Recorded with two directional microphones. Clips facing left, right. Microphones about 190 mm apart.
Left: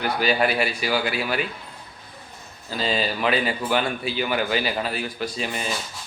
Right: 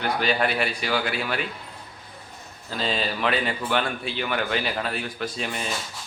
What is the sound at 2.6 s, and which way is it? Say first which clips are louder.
A man's voice: left 2 dB; 5° left (ahead or behind).